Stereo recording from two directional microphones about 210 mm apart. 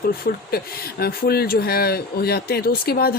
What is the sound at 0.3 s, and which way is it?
Speech, 45° left (ahead or behind).